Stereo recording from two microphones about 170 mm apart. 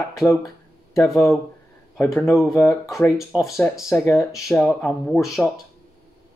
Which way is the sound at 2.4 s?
Centre (ahead or behind).